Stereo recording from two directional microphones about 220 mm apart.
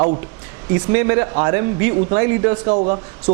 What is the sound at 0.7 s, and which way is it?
Speech, 15° right (ahead or behind).